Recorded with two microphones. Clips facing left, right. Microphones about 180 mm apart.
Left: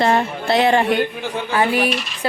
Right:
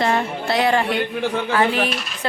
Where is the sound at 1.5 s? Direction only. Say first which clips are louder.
Left 3 dB; 10° left (ahead or behind).